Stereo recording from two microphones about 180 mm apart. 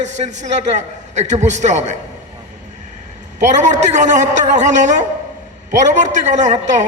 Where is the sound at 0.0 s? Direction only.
40° right (ahead or behind).